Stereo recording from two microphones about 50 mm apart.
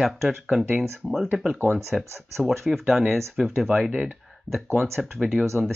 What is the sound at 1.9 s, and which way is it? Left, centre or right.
Speech, centre.